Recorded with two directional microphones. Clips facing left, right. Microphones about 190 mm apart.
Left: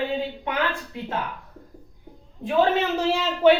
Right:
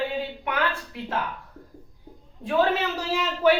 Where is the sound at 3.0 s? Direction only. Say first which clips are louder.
Left 5 dB; 25° left (ahead or behind).